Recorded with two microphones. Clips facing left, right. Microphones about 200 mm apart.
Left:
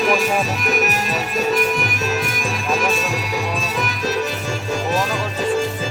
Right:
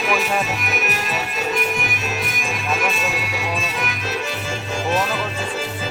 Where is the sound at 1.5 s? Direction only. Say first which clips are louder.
Left 3 dB; 45° left (ahead or behind).